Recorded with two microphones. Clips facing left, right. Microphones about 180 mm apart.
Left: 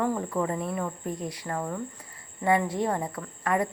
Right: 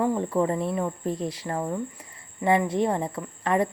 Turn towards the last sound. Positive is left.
turn(degrees=-25)  # may be behind; listen again after turning